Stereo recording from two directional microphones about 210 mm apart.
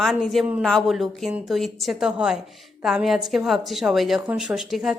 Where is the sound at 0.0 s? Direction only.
Centre (ahead or behind).